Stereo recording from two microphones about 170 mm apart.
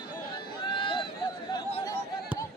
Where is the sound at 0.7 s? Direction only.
30° left (ahead or behind).